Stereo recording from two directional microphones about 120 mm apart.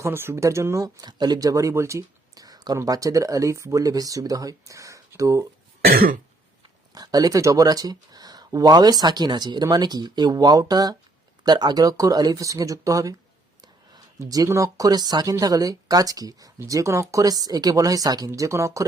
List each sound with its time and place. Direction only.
0.0 s speech: 20° right (ahead or behind)
6.9 s speech: 30° right (ahead or behind)